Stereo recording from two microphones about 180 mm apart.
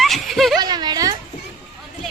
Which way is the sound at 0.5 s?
25° right (ahead or behind).